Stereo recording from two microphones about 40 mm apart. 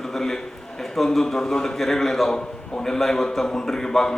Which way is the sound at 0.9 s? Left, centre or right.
Centre.